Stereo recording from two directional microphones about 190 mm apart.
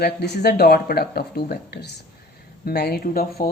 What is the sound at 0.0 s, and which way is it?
Speech, 55° left (ahead or behind).